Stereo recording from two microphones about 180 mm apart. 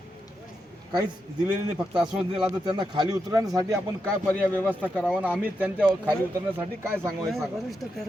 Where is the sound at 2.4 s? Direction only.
20° right (ahead or behind).